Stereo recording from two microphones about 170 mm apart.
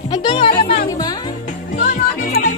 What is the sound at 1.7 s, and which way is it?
Music, 50° left (ahead or behind).